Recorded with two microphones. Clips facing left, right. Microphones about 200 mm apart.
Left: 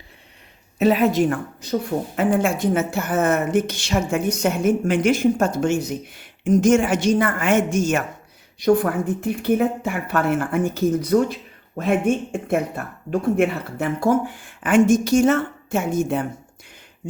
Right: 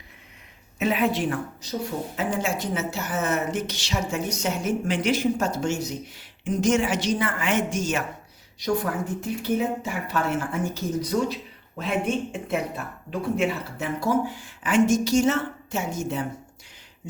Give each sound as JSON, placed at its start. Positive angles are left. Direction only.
{"t": 0.8, "sound": "a woman's voice", "side_deg": 40}